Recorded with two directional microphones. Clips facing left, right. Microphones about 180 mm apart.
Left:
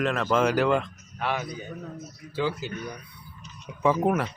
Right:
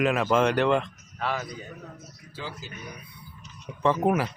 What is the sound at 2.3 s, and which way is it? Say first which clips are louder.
Speech: left 10 dB; 65° left (ahead or behind).